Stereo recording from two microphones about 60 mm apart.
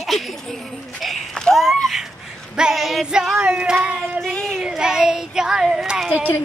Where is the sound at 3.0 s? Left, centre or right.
Centre.